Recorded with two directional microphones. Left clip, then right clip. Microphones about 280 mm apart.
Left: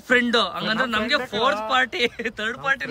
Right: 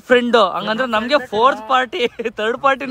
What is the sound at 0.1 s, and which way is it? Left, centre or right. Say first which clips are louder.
A man's voice: right 7 dB; centre.